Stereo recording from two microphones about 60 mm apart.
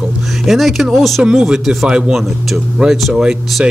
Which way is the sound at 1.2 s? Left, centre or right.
Centre.